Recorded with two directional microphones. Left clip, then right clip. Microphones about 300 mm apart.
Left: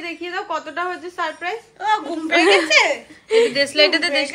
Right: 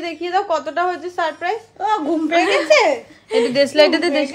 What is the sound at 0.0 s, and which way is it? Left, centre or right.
A woman's voice, right.